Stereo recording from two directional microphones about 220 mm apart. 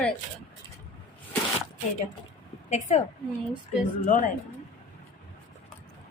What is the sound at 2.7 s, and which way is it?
Speech, 30° left (ahead or behind).